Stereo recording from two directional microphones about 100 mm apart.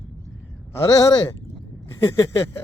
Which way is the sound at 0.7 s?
30° left (ahead or behind).